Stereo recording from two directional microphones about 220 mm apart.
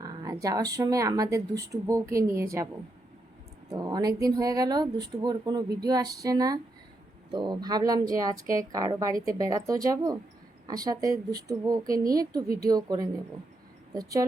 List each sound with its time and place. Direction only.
0.0 s a woman's voice: 15° right (ahead or behind)
3.7 s a woman's voice: 20° right (ahead or behind)